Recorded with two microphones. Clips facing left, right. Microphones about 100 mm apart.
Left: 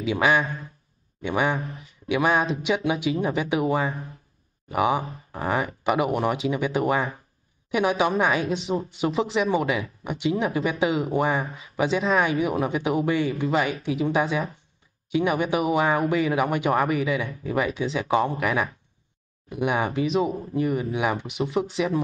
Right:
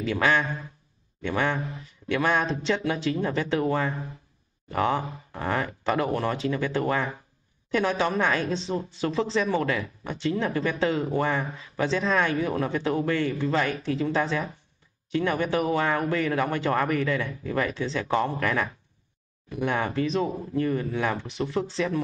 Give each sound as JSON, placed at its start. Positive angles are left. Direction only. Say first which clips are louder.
{"t": 0.0, "sound": "speech", "louder": "left 2 dB", "side_deg": 10}